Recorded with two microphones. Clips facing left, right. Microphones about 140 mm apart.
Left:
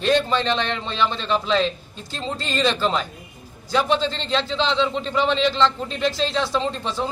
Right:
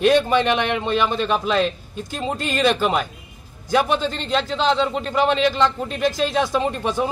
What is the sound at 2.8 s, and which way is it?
A man's voice, 10° right (ahead or behind).